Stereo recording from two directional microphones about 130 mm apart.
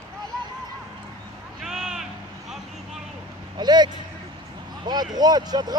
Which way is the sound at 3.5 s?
35° right (ahead or behind).